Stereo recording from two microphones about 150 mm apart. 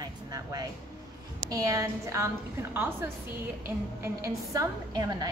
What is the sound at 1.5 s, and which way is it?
A woman's voice, 20° right (ahead or behind).